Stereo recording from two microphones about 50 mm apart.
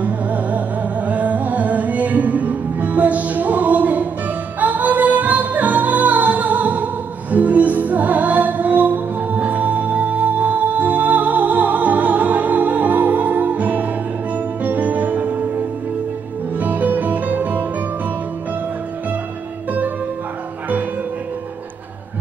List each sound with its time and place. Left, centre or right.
0.0 s music: right
16.5 s music: right